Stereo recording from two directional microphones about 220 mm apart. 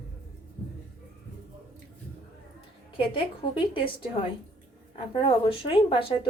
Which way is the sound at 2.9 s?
25° left (ahead or behind).